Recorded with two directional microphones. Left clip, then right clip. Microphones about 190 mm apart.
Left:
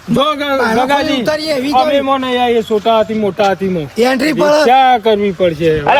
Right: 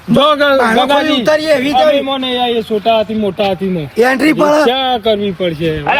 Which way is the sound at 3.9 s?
55° right (ahead or behind).